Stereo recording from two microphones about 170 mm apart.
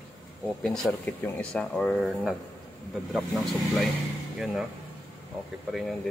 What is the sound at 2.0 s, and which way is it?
Speech, 5° right (ahead or behind).